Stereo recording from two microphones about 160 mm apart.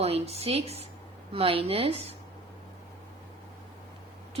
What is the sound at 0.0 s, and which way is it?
Speech, 40° right (ahead or behind).